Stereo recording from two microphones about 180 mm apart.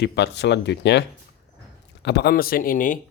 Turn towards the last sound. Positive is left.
turn(degrees=45)  # may be behind; listen again after turning